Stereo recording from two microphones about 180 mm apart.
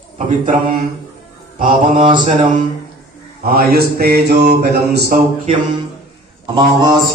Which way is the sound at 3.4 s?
55° right (ahead or behind).